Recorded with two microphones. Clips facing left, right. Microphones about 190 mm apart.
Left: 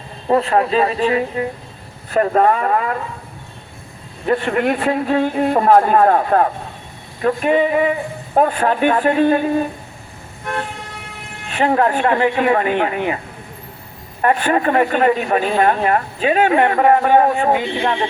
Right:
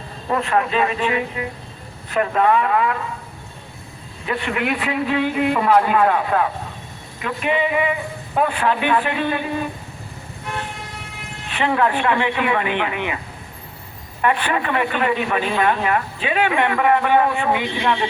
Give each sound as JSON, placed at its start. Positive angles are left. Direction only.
{"t": 0.3, "sound": "a man's voice", "side_deg": 30}
{"t": 4.3, "sound": "speech", "side_deg": 45}
{"t": 11.5, "sound": "a man's voice", "side_deg": 40}
{"t": 14.2, "sound": "a man's voice", "side_deg": 40}